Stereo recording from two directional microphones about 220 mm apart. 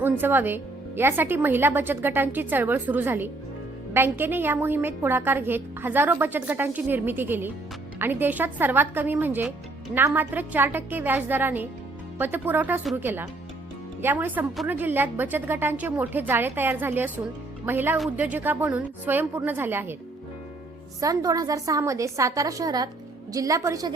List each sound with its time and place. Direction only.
0.0 s a woman's voice: 10° right (ahead or behind)
21.0 s a woman's voice: 15° right (ahead or behind)